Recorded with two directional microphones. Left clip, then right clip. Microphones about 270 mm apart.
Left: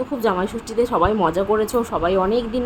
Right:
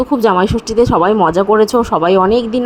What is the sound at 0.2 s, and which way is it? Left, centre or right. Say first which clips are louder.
A woman's voice: right 8 dB; right.